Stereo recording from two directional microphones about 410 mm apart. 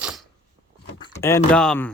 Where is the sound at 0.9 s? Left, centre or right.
Centre.